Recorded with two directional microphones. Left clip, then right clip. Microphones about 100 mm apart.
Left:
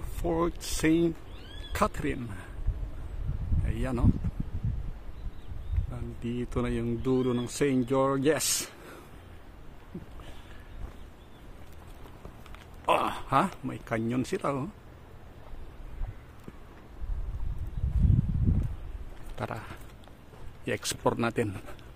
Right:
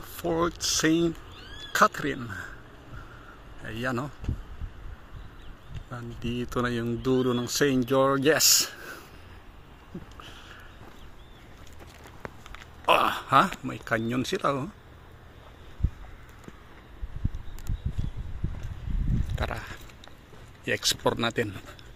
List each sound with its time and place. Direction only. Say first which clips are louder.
0.2 s speech: right 3 dB; 10° left (ahead or behind)
3.6 s speech: right 3 dB; centre (ahead or behind)
5.9 s speech: right 3 dB; 15° right (ahead or behind)
12.5 s speech: right 4 dB; 15° right (ahead or behind)
19.3 s a sound: right 2 dB; 20° left (ahead or behind)
20.6 s speech: right 4 dB; 25° left (ahead or behind)